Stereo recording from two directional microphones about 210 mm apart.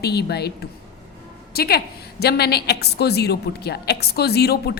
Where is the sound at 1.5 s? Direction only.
45° left (ahead or behind).